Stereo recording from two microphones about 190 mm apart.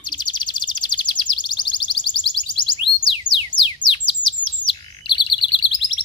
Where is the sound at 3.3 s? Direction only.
25° left (ahead or behind).